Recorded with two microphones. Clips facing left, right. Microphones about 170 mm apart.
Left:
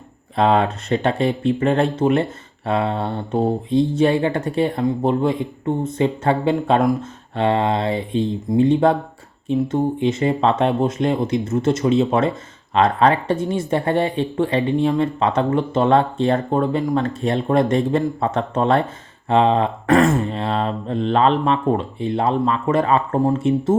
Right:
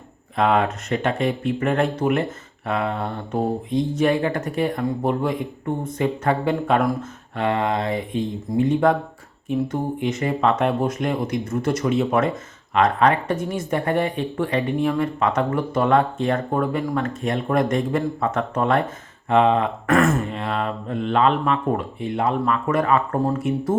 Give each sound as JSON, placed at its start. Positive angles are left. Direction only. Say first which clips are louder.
{"t": 0.3, "sound": "speech", "louder": "left 3 dB", "side_deg": 30}